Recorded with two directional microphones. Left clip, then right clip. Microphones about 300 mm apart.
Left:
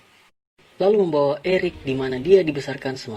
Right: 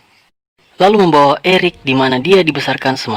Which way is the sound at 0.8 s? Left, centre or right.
Right.